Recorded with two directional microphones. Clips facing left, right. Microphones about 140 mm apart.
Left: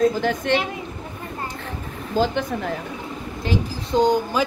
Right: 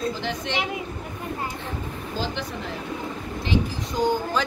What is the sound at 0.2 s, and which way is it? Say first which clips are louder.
Speech: left 8 dB; 50° left (ahead or behind).